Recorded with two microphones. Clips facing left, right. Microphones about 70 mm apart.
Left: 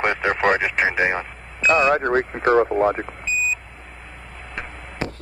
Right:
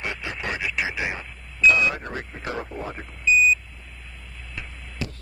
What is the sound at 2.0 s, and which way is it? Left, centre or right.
Speech, left.